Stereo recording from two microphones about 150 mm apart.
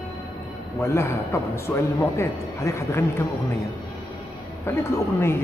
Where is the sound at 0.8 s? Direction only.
20° left (ahead or behind).